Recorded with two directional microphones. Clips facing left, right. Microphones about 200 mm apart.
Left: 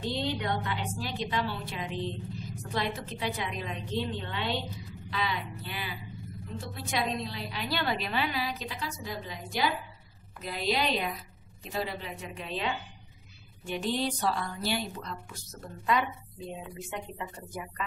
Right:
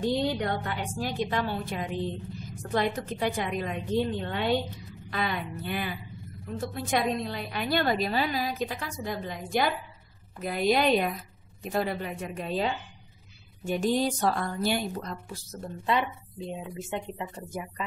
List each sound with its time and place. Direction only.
0.0 s a woman's voice: 45° right (ahead or behind); by 17.8 s 25° right (ahead or behind)